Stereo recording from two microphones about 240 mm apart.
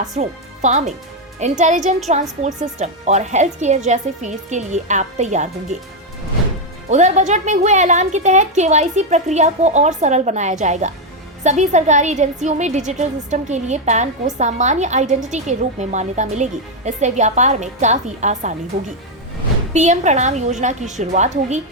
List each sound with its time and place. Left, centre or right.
0.2 s a woman's voice: right
6.9 s a woman's voice: right
19.7 s a woman's voice: right